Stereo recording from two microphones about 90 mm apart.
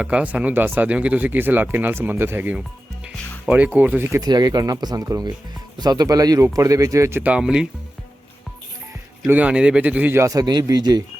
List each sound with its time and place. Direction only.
0.0 s speech: 15° right (ahead or behind)
3.8 s speech: 20° right (ahead or behind)
4.2 s speech: 50° right (ahead or behind)
7.2 s speech: 15° right (ahead or behind)
9.2 s speech: 15° right (ahead or behind)
10.3 s speech: 45° right (ahead or behind)